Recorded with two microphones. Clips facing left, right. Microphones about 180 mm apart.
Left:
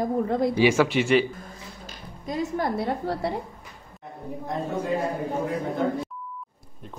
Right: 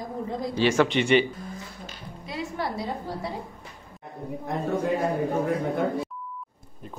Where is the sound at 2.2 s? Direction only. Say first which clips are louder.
Left 5 dB; 45° left (ahead or behind); by 3.3 s 65° left (ahead or behind).